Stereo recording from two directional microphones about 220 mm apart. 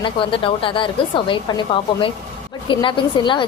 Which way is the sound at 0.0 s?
25° left (ahead or behind).